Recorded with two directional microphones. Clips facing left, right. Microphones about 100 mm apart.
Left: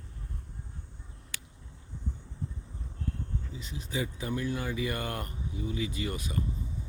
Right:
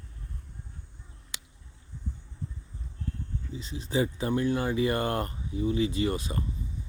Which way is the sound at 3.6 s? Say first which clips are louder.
Right 7 dB; 30° right (ahead or behind).